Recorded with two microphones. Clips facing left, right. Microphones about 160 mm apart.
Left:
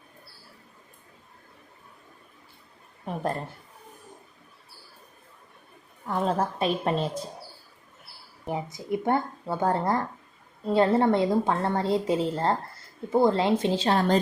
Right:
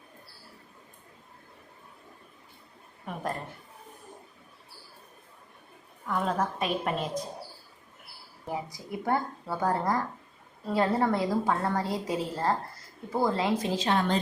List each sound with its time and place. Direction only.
6.1 s a woman's voice: 30° left (ahead or behind)
8.4 s a woman's voice: 25° left (ahead or behind)